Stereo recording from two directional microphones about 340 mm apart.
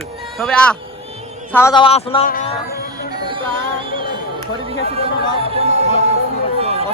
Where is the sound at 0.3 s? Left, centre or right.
Centre.